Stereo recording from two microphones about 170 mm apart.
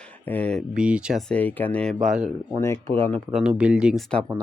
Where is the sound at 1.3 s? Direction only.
10° left (ahead or behind).